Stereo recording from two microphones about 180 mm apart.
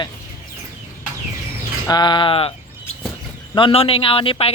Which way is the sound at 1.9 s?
25° left (ahead or behind).